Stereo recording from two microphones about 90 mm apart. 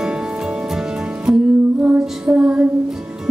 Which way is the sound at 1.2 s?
15° right (ahead or behind).